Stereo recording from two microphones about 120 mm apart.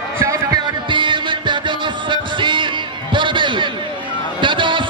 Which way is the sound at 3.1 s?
40° right (ahead or behind).